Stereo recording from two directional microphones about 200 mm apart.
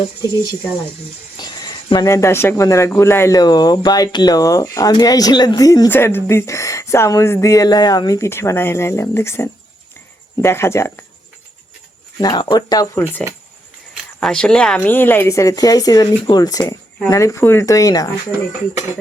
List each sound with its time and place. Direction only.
1.4 s speech: 20° left (ahead or behind)
12.2 s speech: 20° left (ahead or behind)
13.9 s speech: centre (ahead or behind); by 18.1 s 15° left (ahead or behind)